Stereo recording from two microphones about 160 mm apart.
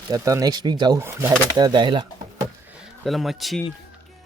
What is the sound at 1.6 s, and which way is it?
Speech, 25° right (ahead or behind).